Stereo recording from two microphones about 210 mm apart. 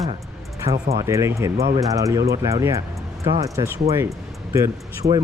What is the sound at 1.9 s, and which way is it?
Speech, 15° right (ahead or behind).